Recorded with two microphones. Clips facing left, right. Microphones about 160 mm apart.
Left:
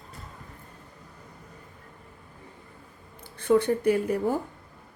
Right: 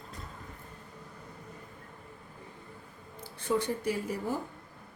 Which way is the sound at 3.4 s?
60° left (ahead or behind).